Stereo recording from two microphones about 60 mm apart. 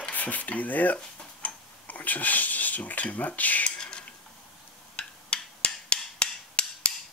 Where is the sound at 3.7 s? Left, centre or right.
Centre.